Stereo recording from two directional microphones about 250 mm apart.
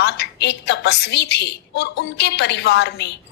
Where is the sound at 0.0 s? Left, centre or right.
Left.